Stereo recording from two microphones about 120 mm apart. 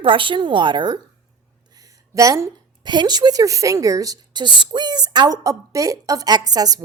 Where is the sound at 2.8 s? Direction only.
40° right (ahead or behind).